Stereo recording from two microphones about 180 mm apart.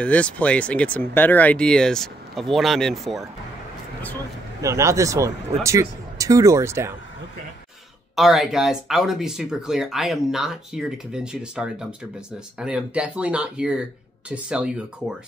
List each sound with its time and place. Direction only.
0.0 s speech: 5° left (ahead or behind)
4.6 s a man's voice: 15° right (ahead or behind)
8.2 s a man's voice: centre (ahead or behind)